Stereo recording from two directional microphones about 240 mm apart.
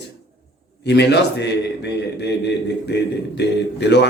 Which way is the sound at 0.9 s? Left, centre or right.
Left.